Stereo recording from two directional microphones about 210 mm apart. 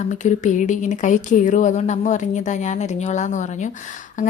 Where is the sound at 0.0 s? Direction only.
35° left (ahead or behind).